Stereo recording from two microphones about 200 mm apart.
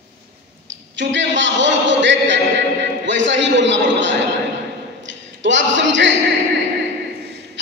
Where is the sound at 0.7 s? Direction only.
65° right (ahead or behind).